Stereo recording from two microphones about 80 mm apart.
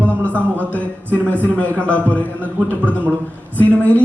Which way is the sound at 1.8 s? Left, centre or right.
Centre.